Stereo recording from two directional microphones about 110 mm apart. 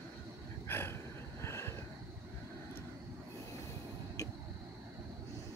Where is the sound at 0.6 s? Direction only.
20° left (ahead or behind).